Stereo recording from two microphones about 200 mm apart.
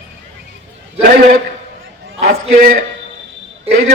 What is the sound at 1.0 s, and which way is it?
A man's voice, 45° right (ahead or behind).